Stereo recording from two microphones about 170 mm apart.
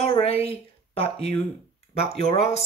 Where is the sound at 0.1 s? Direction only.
35° left (ahead or behind).